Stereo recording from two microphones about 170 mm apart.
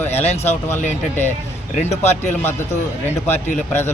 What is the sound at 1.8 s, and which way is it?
Speech, 40° left (ahead or behind).